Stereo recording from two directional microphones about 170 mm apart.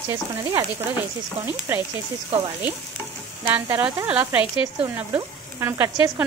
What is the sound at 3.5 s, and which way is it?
Speech, 15° right (ahead or behind).